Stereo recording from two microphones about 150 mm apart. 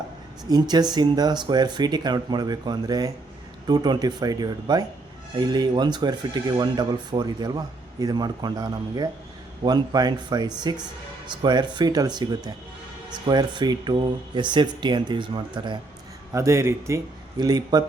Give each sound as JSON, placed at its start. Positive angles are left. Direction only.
{"t": 0.4, "sound": "speech", "side_deg": -25}
{"t": 16.3, "sound": "speech", "side_deg": -20}